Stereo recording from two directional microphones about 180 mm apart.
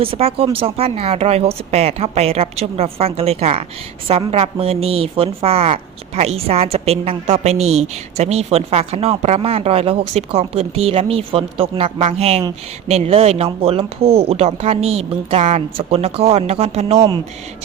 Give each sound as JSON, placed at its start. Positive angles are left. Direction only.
{"t": 0.0, "sound": "speech", "side_deg": -30}